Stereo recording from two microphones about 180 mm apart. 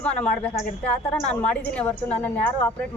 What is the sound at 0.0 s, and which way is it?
A woman's voice, 5° left (ahead or behind).